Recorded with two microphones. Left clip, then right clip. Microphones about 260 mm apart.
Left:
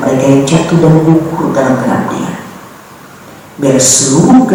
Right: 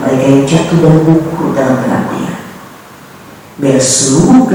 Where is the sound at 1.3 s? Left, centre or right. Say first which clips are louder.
Left 1 dB; centre.